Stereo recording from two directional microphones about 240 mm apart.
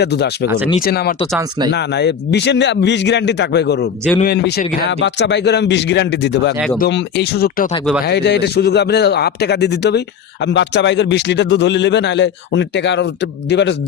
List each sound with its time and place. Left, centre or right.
0.0 s speech: left